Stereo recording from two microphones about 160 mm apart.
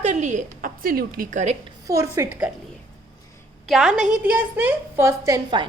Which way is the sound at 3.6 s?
Centre (ahead or behind).